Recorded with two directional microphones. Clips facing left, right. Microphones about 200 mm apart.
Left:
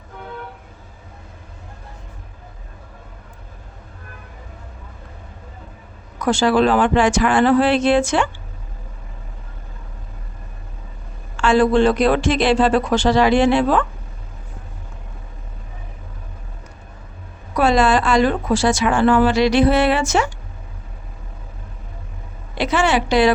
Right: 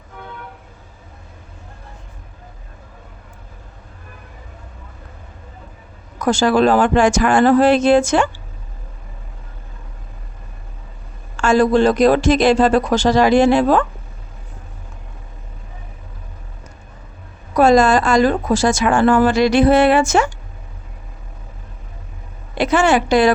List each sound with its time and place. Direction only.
6.1 s a woman's voice: 45° right (ahead or behind)
11.3 s speech: 45° right (ahead or behind)
17.6 s a woman's voice: 45° right (ahead or behind)
22.5 s a woman's voice: 50° right (ahead or behind)